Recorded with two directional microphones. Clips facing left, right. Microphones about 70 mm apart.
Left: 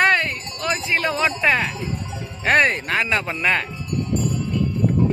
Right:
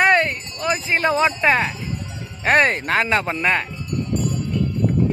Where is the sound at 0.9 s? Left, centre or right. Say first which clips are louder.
Right 3 dB; right.